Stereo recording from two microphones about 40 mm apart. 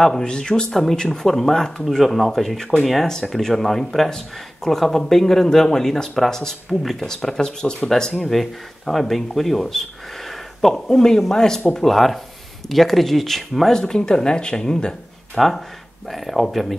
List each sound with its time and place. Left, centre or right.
0.0 s speech: centre
0.3 s speech: left
11.7 s speech: centre
13.7 s speech: centre
15.3 s speech: centre